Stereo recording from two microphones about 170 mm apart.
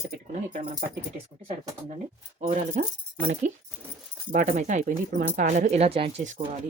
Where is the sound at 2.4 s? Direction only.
50° right (ahead or behind).